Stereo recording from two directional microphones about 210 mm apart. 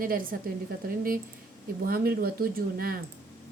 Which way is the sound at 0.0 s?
45° right (ahead or behind).